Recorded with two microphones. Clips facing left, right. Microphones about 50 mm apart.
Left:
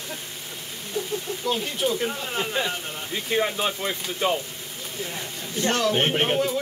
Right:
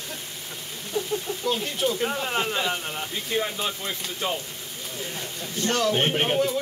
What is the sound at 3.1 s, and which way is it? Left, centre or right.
Speech, centre.